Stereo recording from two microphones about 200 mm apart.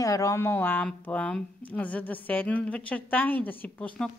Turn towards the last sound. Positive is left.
turn(degrees=5)  # may be behind; listen again after turning